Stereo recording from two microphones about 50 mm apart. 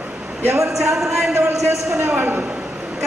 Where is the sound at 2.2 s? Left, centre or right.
Right.